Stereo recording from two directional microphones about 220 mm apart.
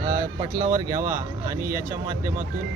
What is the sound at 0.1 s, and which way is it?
Speech, 15° right (ahead or behind).